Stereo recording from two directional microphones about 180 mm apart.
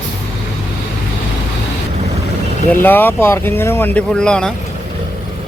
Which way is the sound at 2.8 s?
10° left (ahead or behind).